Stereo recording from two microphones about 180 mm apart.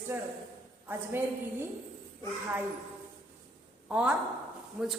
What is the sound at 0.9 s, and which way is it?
Speech, 10° right (ahead or behind).